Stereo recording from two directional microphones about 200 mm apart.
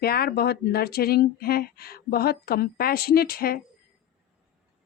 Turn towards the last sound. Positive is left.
turn(degrees=45)  # may be behind; listen again after turning